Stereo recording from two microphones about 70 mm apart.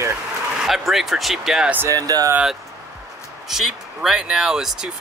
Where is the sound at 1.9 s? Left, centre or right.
Right.